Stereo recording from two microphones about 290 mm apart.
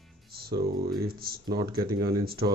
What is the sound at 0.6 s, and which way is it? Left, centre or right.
Speech, right.